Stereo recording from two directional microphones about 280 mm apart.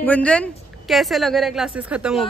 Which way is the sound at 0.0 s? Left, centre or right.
Centre.